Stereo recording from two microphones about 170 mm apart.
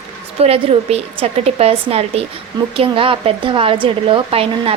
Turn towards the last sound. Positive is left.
turn(degrees=-35)  # may be behind; listen again after turning